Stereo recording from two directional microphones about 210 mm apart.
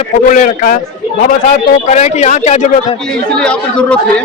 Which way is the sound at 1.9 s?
35° left (ahead or behind).